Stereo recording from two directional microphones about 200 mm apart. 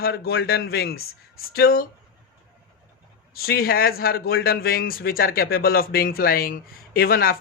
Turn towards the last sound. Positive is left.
turn(degrees=50)  # may be behind; listen again after turning